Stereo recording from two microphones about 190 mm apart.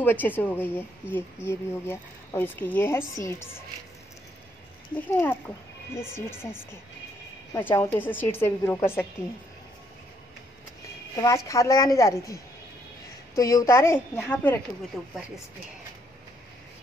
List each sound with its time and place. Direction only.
0.0 s speech: 10° left (ahead or behind)
4.9 s speech: 10° left (ahead or behind)
7.7 s speech: 15° left (ahead or behind)
11.1 s speech: 15° left (ahead or behind)
13.4 s speech: 15° left (ahead or behind); by 15.1 s centre (ahead or behind)